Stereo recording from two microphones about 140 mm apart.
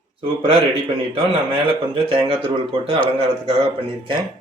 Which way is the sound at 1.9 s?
40° right (ahead or behind).